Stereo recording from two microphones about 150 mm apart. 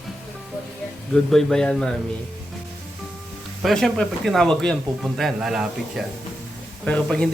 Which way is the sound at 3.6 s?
Centre (ahead or behind).